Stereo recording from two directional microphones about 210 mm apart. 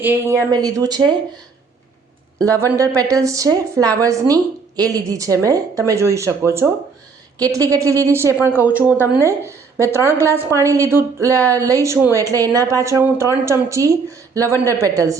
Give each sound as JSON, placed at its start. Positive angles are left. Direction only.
{"t": 0.0, "sound": "speech", "side_deg": -10}
{"t": 2.4, "sound": "speech", "side_deg": -15}